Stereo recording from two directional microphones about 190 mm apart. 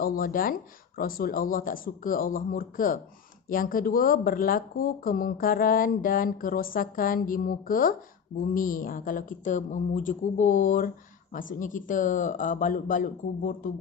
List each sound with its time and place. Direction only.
0.0 s speech: 50° left (ahead or behind)